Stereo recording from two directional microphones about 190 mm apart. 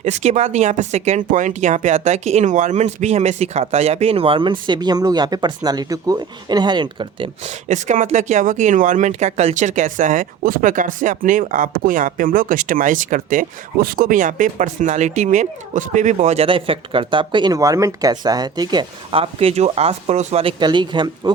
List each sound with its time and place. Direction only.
0.0 s speech: 35° right (ahead or behind)
7.7 s speech: 40° right (ahead or behind)